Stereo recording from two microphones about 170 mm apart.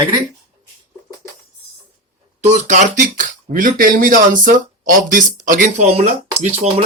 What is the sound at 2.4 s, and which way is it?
Speech, 45° right (ahead or behind).